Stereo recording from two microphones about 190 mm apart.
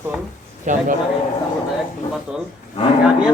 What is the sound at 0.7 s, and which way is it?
Speech, 40° right (ahead or behind).